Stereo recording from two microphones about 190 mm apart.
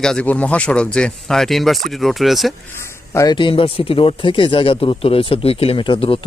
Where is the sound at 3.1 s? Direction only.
20° left (ahead or behind).